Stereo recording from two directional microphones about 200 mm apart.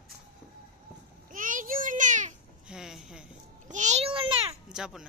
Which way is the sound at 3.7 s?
35° right (ahead or behind).